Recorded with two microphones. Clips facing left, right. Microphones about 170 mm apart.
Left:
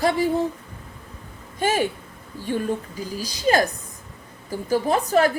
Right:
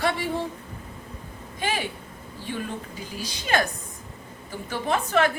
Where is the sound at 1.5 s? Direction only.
45° left (ahead or behind).